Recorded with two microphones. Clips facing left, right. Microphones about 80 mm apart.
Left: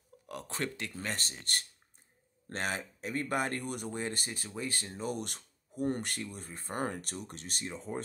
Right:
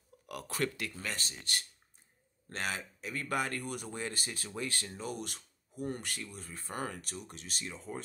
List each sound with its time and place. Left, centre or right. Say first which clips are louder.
0.3 s speech: right 2 dB; left
1.1 s speech: left 1 dB; left
5.0 s speech: left 6 dB; left
7.0 s speech: left 3 dB; left
7.6 s speech: left 4 dB; left